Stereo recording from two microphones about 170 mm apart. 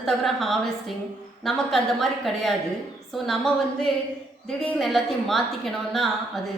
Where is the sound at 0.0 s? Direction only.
Centre (ahead or behind).